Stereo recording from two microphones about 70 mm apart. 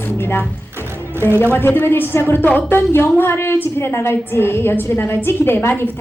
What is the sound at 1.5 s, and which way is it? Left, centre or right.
A woman's voice, left.